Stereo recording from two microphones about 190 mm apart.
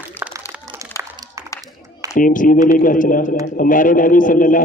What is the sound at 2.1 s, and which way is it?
A man's voice, 45° left (ahead or behind).